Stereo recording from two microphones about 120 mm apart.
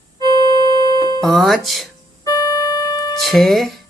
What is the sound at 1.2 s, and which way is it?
Speech, centre (ahead or behind).